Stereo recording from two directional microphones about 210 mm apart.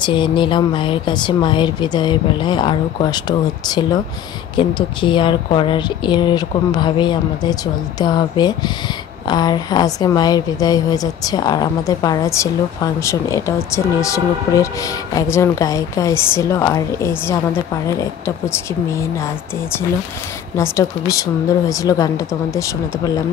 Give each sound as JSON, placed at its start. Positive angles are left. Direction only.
{"t": 0.0, "sound": "a woman's voice", "side_deg": 25}
{"t": 20.5, "sound": "a woman's voice", "side_deg": 15}